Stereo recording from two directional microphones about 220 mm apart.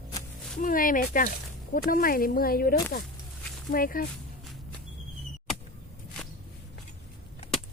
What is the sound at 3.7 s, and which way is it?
Speech, 40° left (ahead or behind).